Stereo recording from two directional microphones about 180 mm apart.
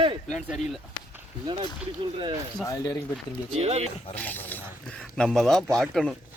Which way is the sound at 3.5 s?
35° right (ahead or behind).